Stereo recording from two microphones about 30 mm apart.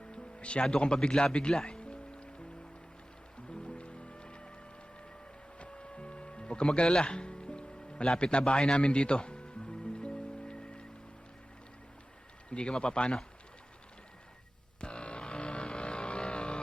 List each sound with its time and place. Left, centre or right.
0.1 s music: left
0.6 s a man's voice: left
1.2 s music: left
3.5 s music: left
5.5 s music: left
8.2 s a man's voice: left
8.8 s music: left
12.5 s a man's voice: left
14.8 s vehicle: left